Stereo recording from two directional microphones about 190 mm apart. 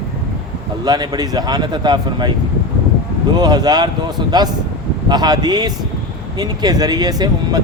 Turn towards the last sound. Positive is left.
turn(degrees=-20)  # may be behind; listen again after turning